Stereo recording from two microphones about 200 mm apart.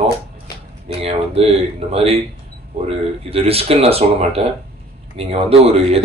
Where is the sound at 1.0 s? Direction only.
30° right (ahead or behind).